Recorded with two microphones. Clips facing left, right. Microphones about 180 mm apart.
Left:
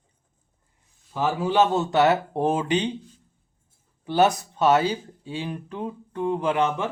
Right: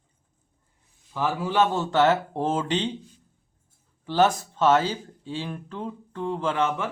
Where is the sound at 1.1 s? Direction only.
20° left (ahead or behind).